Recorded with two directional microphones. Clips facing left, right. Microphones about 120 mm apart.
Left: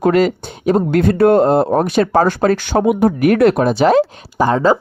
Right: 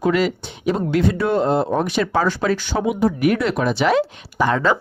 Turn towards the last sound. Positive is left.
turn(degrees=30)  # may be behind; listen again after turning